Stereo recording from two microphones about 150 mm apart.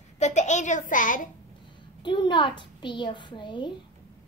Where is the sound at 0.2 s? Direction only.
50° left (ahead or behind).